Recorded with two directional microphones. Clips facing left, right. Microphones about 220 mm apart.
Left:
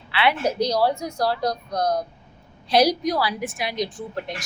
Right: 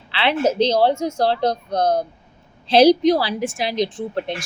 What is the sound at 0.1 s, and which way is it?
A woman's voice, 25° right (ahead or behind).